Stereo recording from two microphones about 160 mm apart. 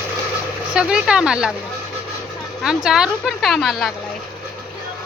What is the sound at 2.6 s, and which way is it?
Speech, 5° right (ahead or behind).